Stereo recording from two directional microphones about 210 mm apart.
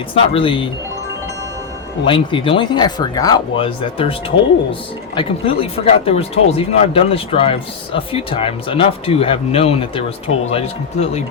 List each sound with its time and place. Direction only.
0.1 s speech: 25° left (ahead or behind)
2.0 s speech: 25° left (ahead or behind)
5.1 s speech: 25° left (ahead or behind)